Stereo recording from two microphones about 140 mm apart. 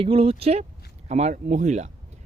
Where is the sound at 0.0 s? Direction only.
45° right (ahead or behind).